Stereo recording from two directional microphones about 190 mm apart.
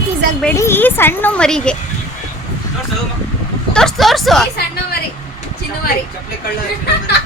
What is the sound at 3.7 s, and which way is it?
Speech, centre (ahead or behind).